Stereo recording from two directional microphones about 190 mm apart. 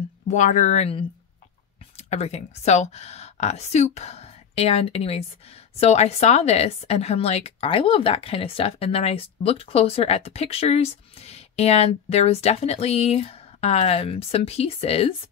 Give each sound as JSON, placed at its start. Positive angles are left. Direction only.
{"t": 0.3, "sound": "a woman's voice", "side_deg": 40}